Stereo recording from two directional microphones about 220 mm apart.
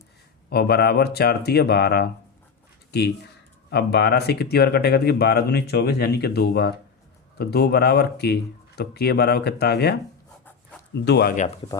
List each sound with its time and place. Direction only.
0.5 s speech: 45° left (ahead or behind)
3.7 s speech: 50° left (ahead or behind)
11.0 s speech: 50° left (ahead or behind)
11.4 s speech: 25° left (ahead or behind)